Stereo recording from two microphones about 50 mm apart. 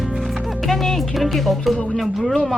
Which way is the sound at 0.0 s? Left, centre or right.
Centre.